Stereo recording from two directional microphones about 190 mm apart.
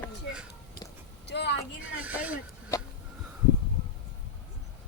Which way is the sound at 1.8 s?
10° right (ahead or behind).